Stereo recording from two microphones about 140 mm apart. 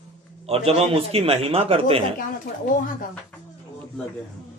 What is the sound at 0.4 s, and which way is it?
A man's voice, 45° right (ahead or behind).